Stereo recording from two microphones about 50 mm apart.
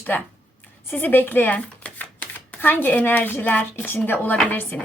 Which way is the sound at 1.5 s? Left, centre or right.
Left.